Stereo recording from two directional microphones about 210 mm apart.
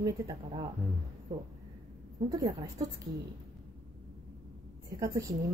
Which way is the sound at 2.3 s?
15° right (ahead or behind).